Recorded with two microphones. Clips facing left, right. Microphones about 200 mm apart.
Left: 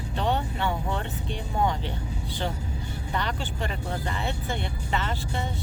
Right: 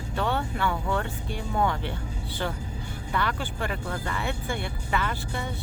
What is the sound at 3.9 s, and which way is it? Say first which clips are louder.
Speech: even; 20° left (ahead or behind).